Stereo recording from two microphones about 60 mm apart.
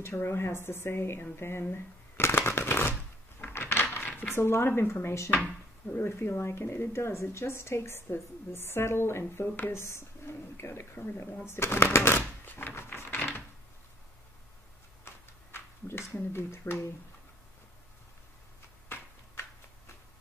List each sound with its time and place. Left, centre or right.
0.0 s speech: left
11.4 s shuffling cards: left
15.1 s tick-tock: left
15.5 s a sound: left
16.2 s speech: left